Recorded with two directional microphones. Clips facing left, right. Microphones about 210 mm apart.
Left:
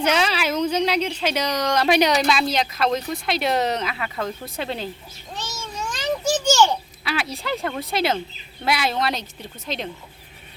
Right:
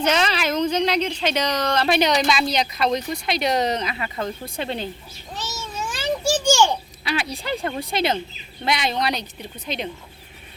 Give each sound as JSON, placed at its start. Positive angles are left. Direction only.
{"t": 0.0, "sound": "a woman's voice", "side_deg": 10}
{"t": 5.7, "sound": "a sound", "side_deg": -5}
{"t": 7.0, "sound": "a woman's voice", "side_deg": 0}